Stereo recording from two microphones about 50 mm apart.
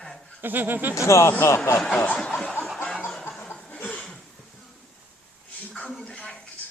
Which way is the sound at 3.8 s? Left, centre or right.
Left.